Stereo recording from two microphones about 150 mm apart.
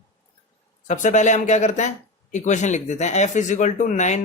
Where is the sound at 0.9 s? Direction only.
55° left (ahead or behind).